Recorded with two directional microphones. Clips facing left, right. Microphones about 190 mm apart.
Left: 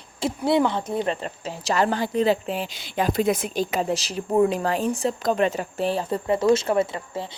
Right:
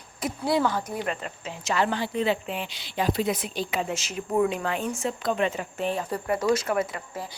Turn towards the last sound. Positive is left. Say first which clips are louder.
# left 5 dB
turn(degrees=30)  # may be behind; listen again after turning